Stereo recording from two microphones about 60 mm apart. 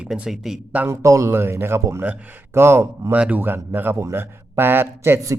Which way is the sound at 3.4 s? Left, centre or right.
Right.